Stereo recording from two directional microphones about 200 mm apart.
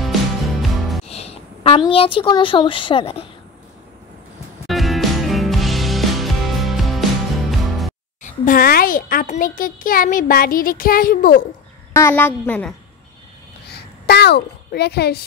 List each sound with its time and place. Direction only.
0.0 s music: centre (ahead or behind)
1.0 s music: 30° left (ahead or behind)
1.9 s speech: 25° left (ahead or behind)
4.6 s music: centre (ahead or behind)
8.2 s a child's voice: 45° left (ahead or behind)
11.9 s a woman's voice: 10° left (ahead or behind)
13.7 s a child's voice: 55° left (ahead or behind)